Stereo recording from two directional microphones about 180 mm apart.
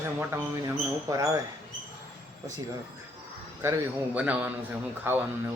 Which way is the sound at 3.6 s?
10° right (ahead or behind).